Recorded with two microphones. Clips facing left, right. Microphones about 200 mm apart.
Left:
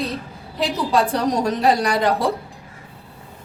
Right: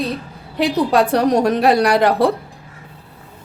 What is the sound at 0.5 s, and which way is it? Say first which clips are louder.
A woman's voice: right 5 dB; 65° right (ahead or behind).